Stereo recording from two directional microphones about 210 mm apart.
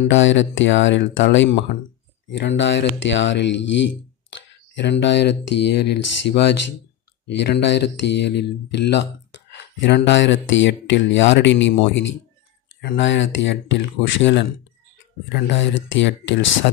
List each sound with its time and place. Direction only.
0.1 s speech: 60° left (ahead or behind)